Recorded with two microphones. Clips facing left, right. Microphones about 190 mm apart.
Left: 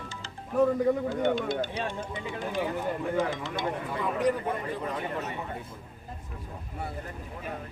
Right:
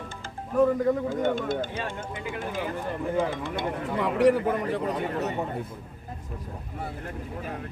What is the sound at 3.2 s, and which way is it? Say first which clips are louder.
Speech: right 2 dB; 55° right (ahead or behind).